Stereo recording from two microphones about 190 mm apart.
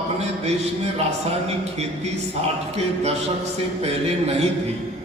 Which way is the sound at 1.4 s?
35° right (ahead or behind).